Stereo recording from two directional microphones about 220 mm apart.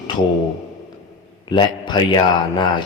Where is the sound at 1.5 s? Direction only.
20° left (ahead or behind).